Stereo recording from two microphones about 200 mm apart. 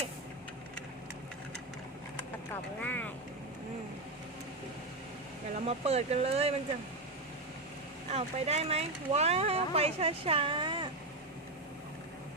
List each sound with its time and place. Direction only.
2.8 s speech: 10° left (ahead or behind)
5.6 s speech: 30° right (ahead or behind)
8.1 s speech: 30° right (ahead or behind)